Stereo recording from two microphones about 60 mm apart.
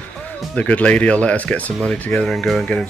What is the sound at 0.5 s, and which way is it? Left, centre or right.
Speech, left.